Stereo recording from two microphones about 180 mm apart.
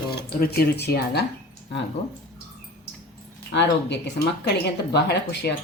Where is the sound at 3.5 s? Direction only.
70° left (ahead or behind).